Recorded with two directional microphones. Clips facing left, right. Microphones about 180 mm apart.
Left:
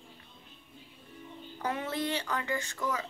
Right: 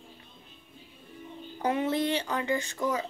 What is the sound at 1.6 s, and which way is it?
A woman's voice, 20° right (ahead or behind).